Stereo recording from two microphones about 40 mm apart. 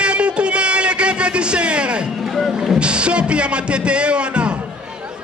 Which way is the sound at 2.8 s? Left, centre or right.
Right.